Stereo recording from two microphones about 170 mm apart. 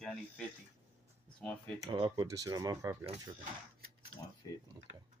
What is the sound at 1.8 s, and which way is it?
Speech, 25° right (ahead or behind).